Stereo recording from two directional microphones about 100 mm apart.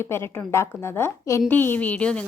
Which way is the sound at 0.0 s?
25° left (ahead or behind).